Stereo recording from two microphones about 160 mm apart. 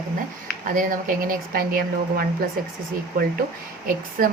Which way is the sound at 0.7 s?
60° right (ahead or behind).